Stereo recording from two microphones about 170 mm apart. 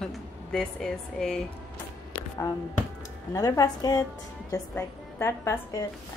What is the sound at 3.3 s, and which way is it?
A woman's voice, 20° left (ahead or behind).